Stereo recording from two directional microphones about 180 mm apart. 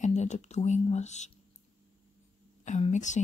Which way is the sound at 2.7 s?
40° left (ahead or behind).